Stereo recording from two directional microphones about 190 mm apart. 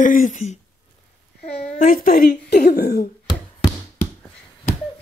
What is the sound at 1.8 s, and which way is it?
Speech, 45° left (ahead or behind).